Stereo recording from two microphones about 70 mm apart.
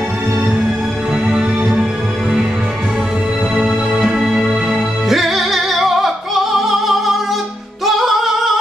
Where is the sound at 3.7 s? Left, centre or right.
Centre.